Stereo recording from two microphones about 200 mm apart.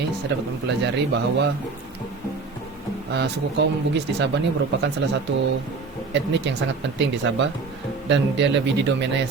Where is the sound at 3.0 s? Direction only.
55° right (ahead or behind).